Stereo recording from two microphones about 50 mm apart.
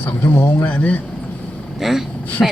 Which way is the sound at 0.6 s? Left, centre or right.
Left.